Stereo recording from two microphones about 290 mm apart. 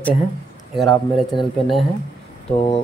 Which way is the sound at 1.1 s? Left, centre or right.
Centre.